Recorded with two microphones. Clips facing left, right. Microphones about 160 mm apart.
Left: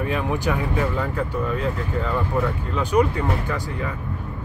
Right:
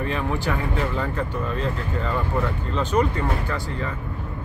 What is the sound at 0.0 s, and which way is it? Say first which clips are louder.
Speech: left 2 dB; 15° left (ahead or behind).